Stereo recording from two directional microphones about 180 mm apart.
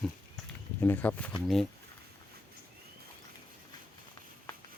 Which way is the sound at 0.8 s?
10° left (ahead or behind).